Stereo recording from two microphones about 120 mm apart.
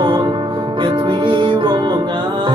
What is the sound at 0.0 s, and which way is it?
Music, 40° right (ahead or behind).